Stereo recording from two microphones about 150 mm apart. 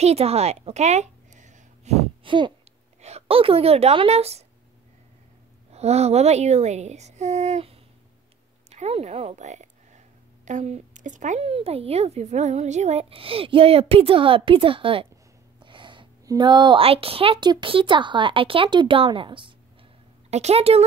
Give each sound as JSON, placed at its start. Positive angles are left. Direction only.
{"t": 0.0, "sound": "a sound", "side_deg": -45}
{"t": 3.0, "sound": "speech", "side_deg": -45}
{"t": 5.7, "sound": "a woman's voice", "side_deg": -45}
{"t": 20.2, "sound": "speech", "side_deg": -45}